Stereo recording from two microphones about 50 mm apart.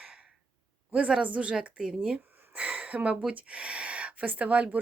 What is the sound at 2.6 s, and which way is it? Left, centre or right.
Speech, right.